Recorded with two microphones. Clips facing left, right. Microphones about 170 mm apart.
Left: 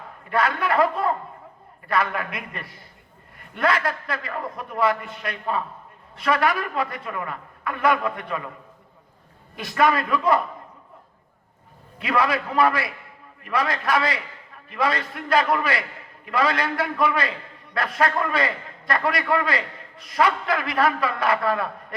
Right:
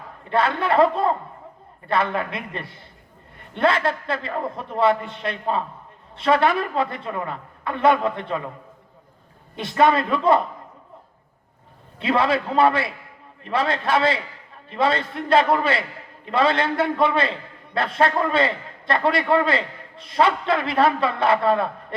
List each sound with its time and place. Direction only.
0.3 s a man's voice: 25° right (ahead or behind)
9.6 s a man's voice: 25° right (ahead or behind)
11.9 s a man's voice: 25° right (ahead or behind)